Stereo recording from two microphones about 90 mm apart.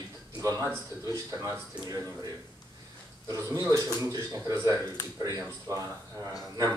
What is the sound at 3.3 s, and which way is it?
A man's voice, 40° right (ahead or behind).